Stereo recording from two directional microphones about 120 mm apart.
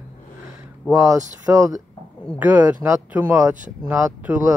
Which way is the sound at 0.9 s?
25° right (ahead or behind).